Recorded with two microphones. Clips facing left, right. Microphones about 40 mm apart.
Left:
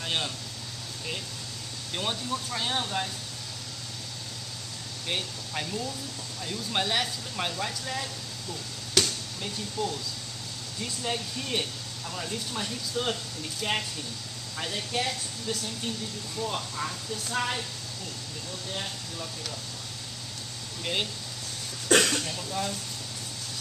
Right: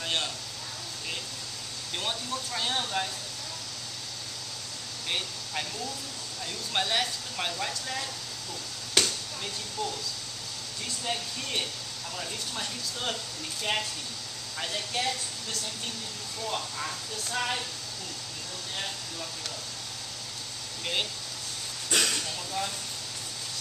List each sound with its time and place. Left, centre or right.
0.0 s a sound: centre
2.0 s speech: centre
5.0 s speech: centre
8.9 s chop: centre
10.8 s speech: centre
20.8 s speech: centre
21.9 s throat clearing: left